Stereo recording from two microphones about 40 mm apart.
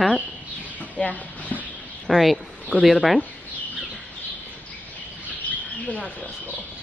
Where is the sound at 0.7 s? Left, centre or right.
Left.